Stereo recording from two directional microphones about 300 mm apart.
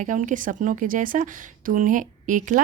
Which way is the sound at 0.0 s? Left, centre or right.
Right.